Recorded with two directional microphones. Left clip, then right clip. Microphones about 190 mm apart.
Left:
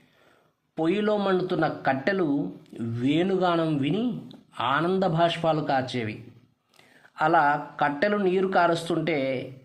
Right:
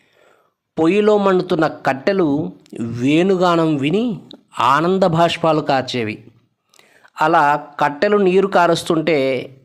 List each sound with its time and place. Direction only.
0.8 s speech: 40° right (ahead or behind)